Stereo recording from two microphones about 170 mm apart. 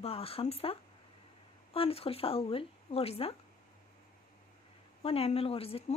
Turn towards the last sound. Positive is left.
turn(degrees=35)  # may be behind; listen again after turning